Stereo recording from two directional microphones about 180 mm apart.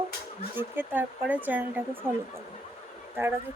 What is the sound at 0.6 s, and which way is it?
Speech, 10° right (ahead or behind).